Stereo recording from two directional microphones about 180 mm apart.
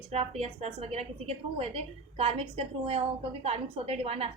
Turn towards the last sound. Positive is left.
turn(degrees=-35)  # may be behind; listen again after turning